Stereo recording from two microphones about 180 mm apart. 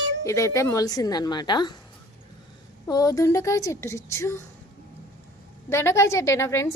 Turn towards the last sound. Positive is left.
turn(degrees=15)  # may be behind; listen again after turning